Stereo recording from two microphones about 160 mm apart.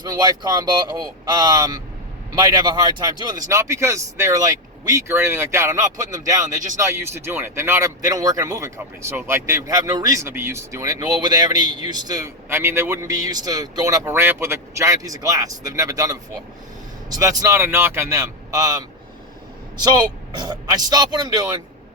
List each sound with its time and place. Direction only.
0.0 s speech: 25° right (ahead or behind)